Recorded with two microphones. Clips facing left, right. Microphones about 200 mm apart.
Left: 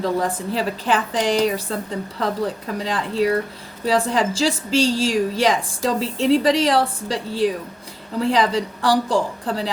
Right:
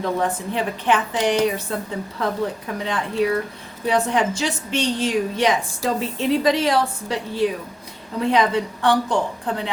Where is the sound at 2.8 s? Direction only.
35° left (ahead or behind).